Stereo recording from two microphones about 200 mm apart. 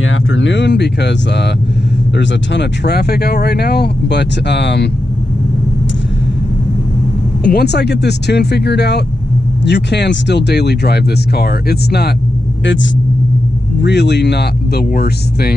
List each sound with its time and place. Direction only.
0.0 s speech: 75° left (ahead or behind)
7.4 s speech: 55° left (ahead or behind)
12.6 s speech: 70° left (ahead or behind)
13.8 s speech: 55° left (ahead or behind)